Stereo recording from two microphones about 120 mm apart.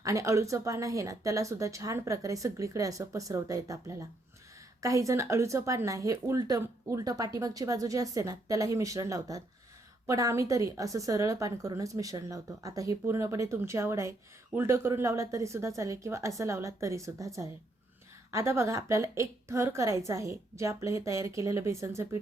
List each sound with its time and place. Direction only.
0.0 s speech: 25° right (ahead or behind)